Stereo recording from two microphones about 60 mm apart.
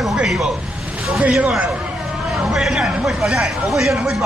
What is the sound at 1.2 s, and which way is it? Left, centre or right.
Speech, centre.